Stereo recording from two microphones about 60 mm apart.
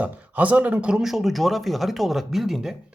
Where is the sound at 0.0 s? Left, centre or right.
Right.